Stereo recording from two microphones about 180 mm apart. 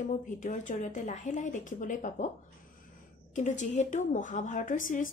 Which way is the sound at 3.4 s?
40° left (ahead or behind).